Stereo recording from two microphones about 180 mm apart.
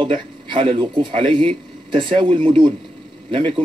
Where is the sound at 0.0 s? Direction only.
30° right (ahead or behind).